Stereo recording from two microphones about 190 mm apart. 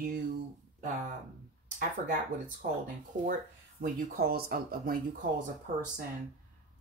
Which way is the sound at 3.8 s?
50° right (ahead or behind).